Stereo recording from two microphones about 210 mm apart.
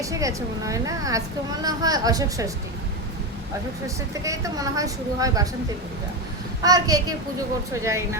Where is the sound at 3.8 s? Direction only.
15° right (ahead or behind).